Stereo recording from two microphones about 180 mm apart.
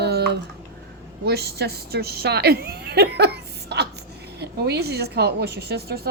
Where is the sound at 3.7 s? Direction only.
65° right (ahead or behind).